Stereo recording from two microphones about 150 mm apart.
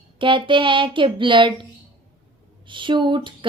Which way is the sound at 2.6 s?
35° right (ahead or behind).